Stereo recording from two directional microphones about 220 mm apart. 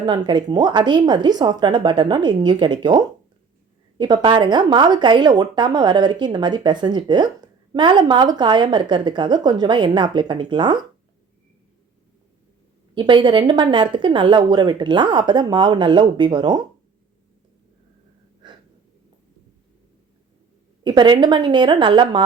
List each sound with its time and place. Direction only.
0.0 s a woman's voice: 20° right (ahead or behind)
12.9 s a woman's voice: 20° right (ahead or behind)
18.4 s gasp: 20° right (ahead or behind)
20.8 s a woman's voice: 20° right (ahead or behind)